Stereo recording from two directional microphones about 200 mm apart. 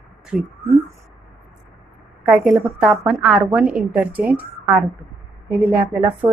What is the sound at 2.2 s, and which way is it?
A woman's voice, centre (ahead or behind).